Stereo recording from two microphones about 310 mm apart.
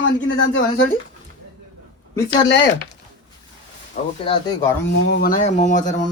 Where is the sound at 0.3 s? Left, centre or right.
Left.